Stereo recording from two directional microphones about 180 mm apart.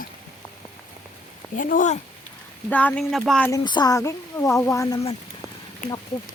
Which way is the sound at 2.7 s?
10° left (ahead or behind).